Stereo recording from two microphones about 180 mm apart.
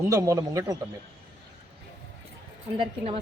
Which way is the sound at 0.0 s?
15° right (ahead or behind).